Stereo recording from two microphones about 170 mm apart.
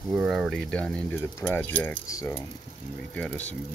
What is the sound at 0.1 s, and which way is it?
Speech, centre (ahead or behind).